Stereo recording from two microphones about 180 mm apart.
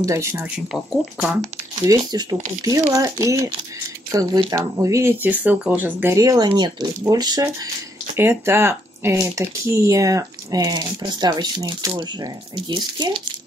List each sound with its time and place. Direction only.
0.0 s speech: 15° right (ahead or behind)
1.9 s speech: 20° right (ahead or behind)